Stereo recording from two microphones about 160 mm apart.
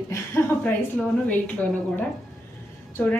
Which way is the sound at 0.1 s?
15° left (ahead or behind).